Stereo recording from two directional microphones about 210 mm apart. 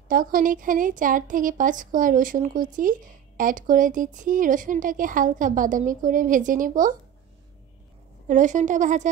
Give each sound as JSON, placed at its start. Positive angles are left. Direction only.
{"t": 0.1, "sound": "a woman's voice", "side_deg": -40}
{"t": 8.3, "sound": "a woman's voice", "side_deg": -35}